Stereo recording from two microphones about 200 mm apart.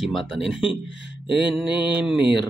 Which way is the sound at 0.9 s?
65° right (ahead or behind).